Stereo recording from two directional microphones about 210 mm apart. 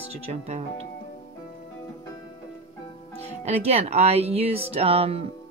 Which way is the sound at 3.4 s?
30° right (ahead or behind).